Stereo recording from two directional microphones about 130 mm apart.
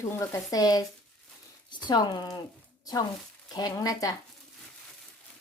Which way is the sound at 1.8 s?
30° left (ahead or behind).